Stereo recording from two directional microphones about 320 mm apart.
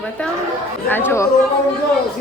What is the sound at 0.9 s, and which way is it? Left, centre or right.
Speech, centre.